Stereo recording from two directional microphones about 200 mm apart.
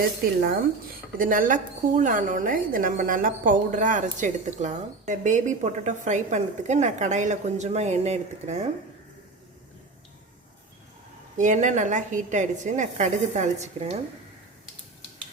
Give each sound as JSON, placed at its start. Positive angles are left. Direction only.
{"t": 1.2, "sound": "a woman's voice", "side_deg": -45}
{"t": 11.3, "sound": "a woman's voice", "side_deg": -40}